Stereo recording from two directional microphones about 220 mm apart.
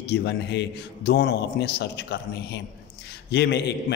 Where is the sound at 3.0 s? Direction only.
50° left (ahead or behind).